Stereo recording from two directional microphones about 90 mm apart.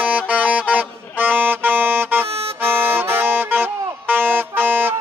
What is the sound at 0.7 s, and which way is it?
Music, 20° right (ahead or behind).